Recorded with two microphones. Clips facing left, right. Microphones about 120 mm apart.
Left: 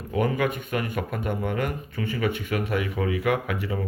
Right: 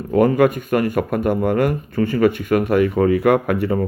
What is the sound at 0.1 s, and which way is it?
Speech, 50° right (ahead or behind).